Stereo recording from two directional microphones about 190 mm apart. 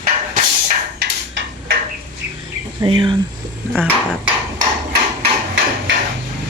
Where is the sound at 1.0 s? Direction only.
60° right (ahead or behind).